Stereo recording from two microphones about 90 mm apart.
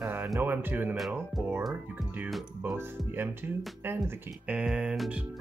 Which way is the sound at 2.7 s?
25° right (ahead or behind).